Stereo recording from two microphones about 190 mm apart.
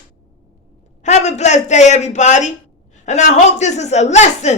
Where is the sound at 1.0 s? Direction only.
35° left (ahead or behind).